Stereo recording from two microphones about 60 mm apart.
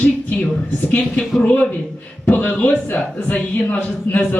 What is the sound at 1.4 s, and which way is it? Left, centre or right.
A man's voice, left.